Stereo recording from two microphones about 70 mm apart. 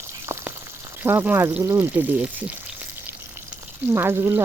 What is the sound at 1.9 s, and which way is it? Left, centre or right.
Speech, right.